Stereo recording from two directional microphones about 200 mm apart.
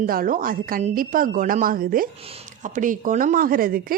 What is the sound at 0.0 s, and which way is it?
A woman's voice, 45° right (ahead or behind).